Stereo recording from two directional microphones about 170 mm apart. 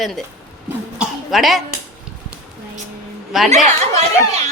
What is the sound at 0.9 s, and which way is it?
Cough, 5° right (ahead or behind).